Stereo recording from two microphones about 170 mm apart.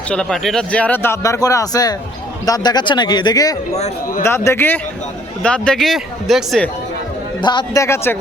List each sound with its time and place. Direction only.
0.1 s speech: 5° left (ahead or behind); by 3.5 s 25° left (ahead or behind)
3.8 s speech: 40° left (ahead or behind)
4.2 s speech: 15° left (ahead or behind)
7.4 s speech: 25° left (ahead or behind)